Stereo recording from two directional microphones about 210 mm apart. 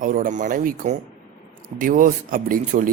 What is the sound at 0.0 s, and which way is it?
Speech, 40° right (ahead or behind).